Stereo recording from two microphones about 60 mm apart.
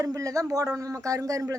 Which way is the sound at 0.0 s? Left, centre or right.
Right.